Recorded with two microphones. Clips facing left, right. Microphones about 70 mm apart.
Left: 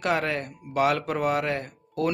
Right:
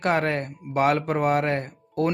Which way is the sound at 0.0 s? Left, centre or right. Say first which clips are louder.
Right 3 dB; right.